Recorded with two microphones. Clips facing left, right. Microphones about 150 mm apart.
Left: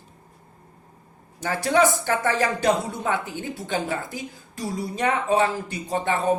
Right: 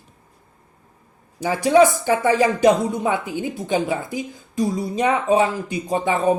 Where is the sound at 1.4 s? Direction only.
15° right (ahead or behind).